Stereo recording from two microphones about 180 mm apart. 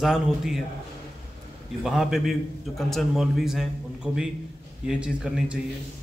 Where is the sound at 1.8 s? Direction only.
Centre (ahead or behind).